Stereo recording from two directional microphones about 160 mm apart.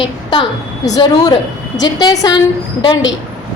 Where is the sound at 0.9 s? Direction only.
25° left (ahead or behind).